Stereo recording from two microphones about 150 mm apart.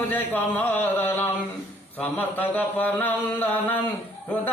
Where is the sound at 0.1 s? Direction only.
10° left (ahead or behind).